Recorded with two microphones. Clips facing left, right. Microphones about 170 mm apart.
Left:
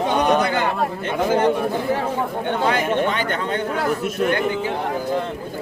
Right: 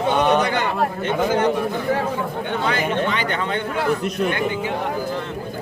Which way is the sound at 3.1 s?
45° left (ahead or behind).